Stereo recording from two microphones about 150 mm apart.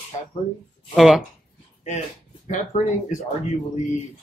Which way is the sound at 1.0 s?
Centre (ahead or behind).